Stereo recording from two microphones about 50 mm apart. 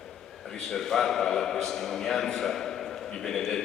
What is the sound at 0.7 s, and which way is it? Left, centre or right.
A man's voice, centre.